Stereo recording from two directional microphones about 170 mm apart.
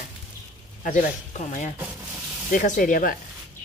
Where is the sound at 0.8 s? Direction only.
50° left (ahead or behind).